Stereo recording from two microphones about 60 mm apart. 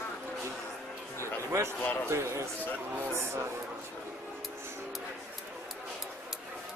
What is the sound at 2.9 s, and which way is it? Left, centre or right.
Speech, right.